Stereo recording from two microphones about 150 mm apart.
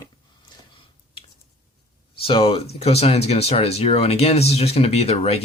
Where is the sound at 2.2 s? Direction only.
40° left (ahead or behind).